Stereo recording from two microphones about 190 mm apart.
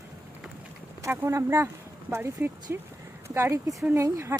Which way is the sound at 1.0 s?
15° right (ahead or behind).